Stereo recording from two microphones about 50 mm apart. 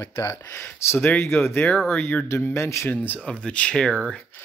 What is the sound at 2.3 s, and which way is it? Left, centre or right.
Speech, left.